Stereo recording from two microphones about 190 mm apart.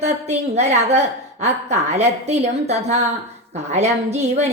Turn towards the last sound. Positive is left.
turn(degrees=-35)  # may be behind; listen again after turning